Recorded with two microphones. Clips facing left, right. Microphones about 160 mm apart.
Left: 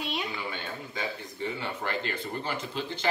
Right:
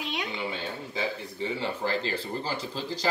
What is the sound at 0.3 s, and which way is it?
Speech, 30° right (ahead or behind).